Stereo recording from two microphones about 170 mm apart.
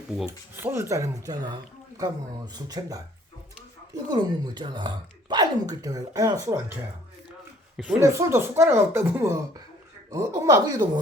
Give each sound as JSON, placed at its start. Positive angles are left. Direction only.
{"t": 0.3, "sound": "speech", "side_deg": -15}
{"t": 7.8, "sound": "speech", "side_deg": -5}
{"t": 8.0, "sound": "speech", "side_deg": -15}